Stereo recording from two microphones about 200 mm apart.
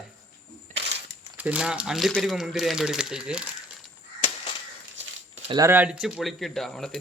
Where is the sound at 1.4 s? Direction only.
5° right (ahead or behind).